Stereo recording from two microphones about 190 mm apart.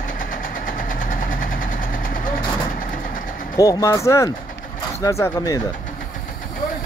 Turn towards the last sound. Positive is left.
turn(degrees=15)  # may be behind; listen again after turning